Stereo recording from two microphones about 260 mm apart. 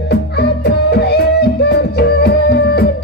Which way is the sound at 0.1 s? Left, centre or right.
Left.